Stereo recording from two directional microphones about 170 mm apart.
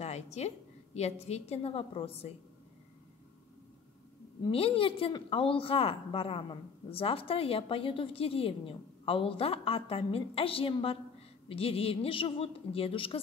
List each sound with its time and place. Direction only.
0.0 s a woman's voice: 40° left (ahead or behind)
4.5 s a woman's voice: 35° left (ahead or behind)